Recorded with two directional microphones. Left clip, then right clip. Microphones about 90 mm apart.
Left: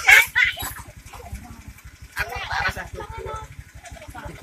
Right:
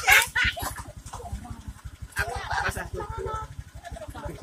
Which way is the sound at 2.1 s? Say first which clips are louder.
Left 2 dB; 30° right (ahead or behind).